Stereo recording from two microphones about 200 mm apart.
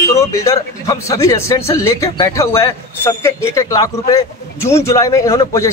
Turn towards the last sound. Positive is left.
turn(degrees=15)  # may be behind; listen again after turning